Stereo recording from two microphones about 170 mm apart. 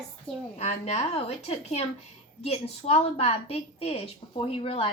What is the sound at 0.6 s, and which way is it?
A woman's voice, 40° left (ahead or behind).